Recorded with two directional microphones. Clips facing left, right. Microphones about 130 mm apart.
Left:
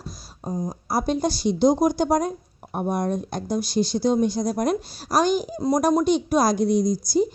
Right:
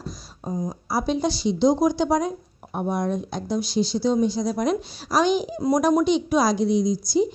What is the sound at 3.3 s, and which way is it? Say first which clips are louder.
Speech: left 1 dB; 50° left (ahead or behind).